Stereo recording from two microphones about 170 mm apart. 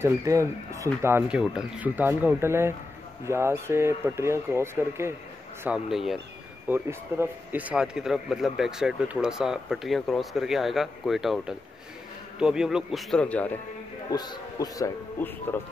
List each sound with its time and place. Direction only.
0.0 s speech: 15° right (ahead or behind)
5.6 s speech: 5° right (ahead or behind)
6.7 s speech: 15° right (ahead or behind); by 13.6 s 10° left (ahead or behind)
14.1 s speech: 25° left (ahead or behind)
15.1 s speech: 10° left (ahead or behind)